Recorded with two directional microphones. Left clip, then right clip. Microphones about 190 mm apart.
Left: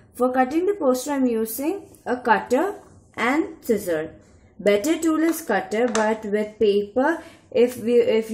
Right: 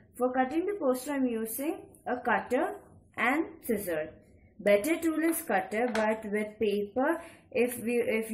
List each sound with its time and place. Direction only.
0.2 s a woman's voice: 35° left (ahead or behind)